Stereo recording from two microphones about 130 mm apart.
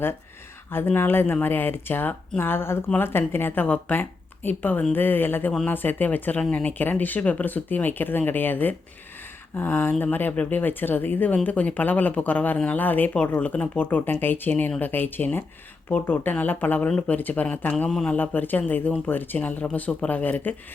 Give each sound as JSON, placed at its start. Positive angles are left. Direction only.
{"t": 0.7, "sound": "speech", "side_deg": 15}